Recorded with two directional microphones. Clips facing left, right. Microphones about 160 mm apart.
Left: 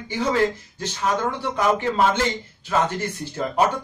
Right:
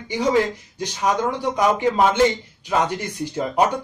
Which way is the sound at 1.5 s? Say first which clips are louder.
Right 2 dB; 15° right (ahead or behind).